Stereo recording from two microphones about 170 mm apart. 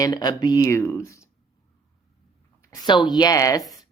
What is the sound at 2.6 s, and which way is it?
Speech, 25° left (ahead or behind).